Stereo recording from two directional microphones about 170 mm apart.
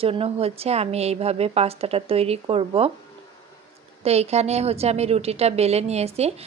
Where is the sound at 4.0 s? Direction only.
40° right (ahead or behind).